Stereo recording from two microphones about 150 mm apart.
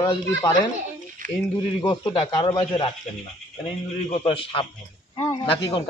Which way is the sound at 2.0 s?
30° left (ahead or behind).